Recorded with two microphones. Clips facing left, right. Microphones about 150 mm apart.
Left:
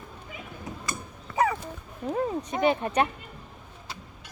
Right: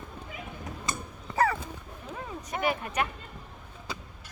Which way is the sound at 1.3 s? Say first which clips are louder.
Left 1 dB; 20° right (ahead or behind).